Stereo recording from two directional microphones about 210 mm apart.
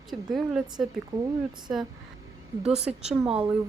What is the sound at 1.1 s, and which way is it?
Speech, 15° right (ahead or behind).